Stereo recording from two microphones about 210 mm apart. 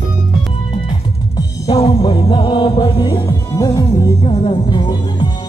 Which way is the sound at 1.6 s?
20° left (ahead or behind).